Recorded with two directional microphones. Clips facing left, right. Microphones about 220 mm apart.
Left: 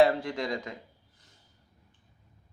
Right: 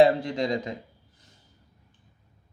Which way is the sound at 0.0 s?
15° right (ahead or behind).